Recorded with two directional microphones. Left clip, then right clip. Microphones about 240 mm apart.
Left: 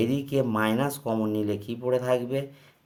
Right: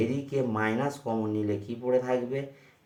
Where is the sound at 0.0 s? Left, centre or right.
Left.